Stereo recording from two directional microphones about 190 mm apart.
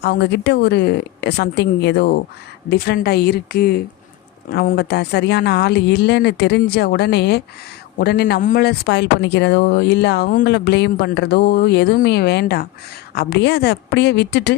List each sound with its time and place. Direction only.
0.0 s speech: 60° left (ahead or behind)